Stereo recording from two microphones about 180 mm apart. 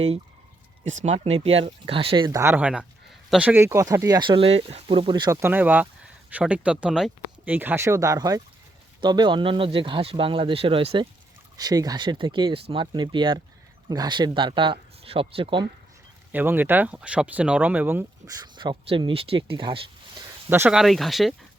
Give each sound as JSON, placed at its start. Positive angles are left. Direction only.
{"t": 0.9, "sound": "speech", "side_deg": -40}
{"t": 2.4, "sound": "speech", "side_deg": -10}
{"t": 5.4, "sound": "speech", "side_deg": -10}
{"t": 16.3, "sound": "speech", "side_deg": -10}
{"t": 20.5, "sound": "speech", "side_deg": -10}